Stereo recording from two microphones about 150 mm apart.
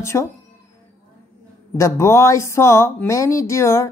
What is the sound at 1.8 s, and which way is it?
A woman's voice, 20° left (ahead or behind).